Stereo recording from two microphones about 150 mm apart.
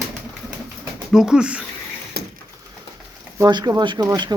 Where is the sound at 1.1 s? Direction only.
5° right (ahead or behind).